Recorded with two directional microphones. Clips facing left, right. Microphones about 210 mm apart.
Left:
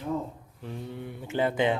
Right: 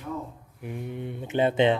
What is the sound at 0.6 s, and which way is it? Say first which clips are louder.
Speech: right 3 dB; 15° right (ahead or behind).